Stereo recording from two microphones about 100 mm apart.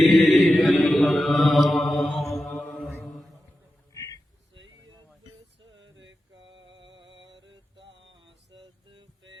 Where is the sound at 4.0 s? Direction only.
35° left (ahead or behind).